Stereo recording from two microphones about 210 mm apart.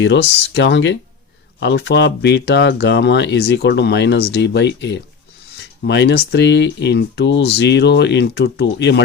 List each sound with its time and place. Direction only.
0.0 s speech: 55° left (ahead or behind)